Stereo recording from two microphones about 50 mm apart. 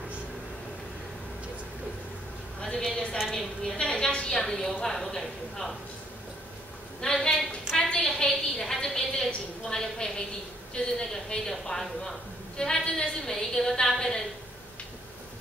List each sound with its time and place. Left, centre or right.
2.6 s a woman's voice: centre
3.7 s a woman's voice: centre
7.0 s a woman's voice: centre